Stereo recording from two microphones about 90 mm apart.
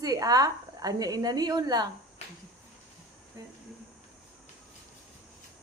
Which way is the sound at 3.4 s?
40° right (ahead or behind).